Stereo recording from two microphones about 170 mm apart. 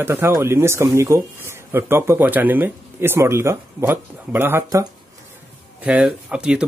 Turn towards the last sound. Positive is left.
turn(degrees=-5)  # may be behind; listen again after turning